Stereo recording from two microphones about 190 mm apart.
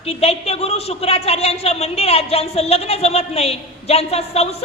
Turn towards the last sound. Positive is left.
turn(degrees=35)  # may be behind; listen again after turning